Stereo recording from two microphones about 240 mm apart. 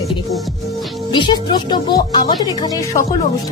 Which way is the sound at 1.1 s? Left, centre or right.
Centre.